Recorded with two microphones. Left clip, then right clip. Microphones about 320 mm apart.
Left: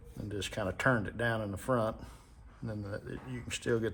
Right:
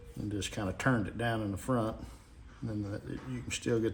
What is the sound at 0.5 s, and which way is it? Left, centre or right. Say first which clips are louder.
A man's voice: left 3 dB; left.